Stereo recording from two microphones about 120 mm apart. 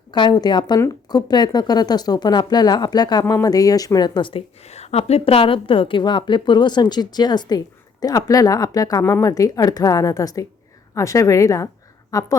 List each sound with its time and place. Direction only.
0.1 s speech: 35° left (ahead or behind)
4.6 s a woman's voice: 60° left (ahead or behind); by 12.3 s 30° left (ahead or behind)